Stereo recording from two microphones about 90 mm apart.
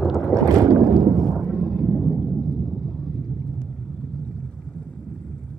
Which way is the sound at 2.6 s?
5° left (ahead or behind).